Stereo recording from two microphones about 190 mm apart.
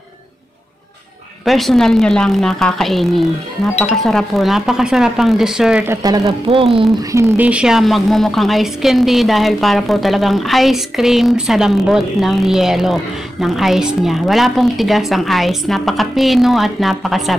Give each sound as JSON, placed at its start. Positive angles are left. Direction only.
{"t": 1.4, "sound": "a woman's voice", "side_deg": 0}
{"t": 6.2, "sound": "speech", "side_deg": -30}
{"t": 7.1, "sound": "a woman's voice", "side_deg": -10}